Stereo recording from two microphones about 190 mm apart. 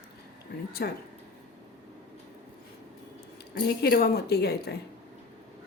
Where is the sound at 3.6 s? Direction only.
55° left (ahead or behind).